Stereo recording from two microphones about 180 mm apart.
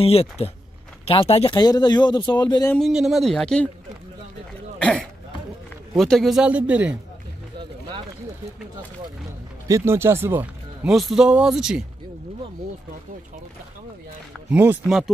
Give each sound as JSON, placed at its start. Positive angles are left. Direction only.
{"t": 0.0, "sound": "speech", "side_deg": 35}
{"t": 2.7, "sound": "speech", "side_deg": 0}
{"t": 4.7, "sound": "a sound", "side_deg": 5}
{"t": 5.9, "sound": "speech", "side_deg": 0}
{"t": 9.7, "sound": "speech", "side_deg": -15}
{"t": 14.5, "sound": "speech", "side_deg": -10}